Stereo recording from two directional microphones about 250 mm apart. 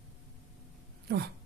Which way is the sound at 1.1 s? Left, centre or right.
Right.